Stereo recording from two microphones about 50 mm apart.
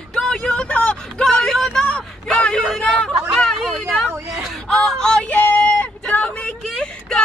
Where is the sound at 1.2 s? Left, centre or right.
Centre.